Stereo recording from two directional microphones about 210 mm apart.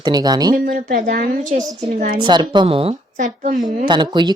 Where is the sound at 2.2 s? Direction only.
20° right (ahead or behind); by 3.6 s 35° right (ahead or behind).